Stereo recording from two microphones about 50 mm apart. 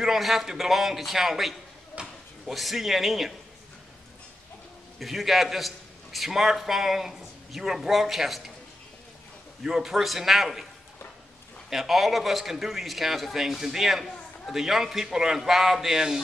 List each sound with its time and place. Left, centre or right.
0.0 s a man's voice: centre
2.0 s a sound: centre
2.4 s a man's voice: centre
4.9 s a man's voice: centre
9.6 s a man's voice: centre
11.7 s a man's voice: centre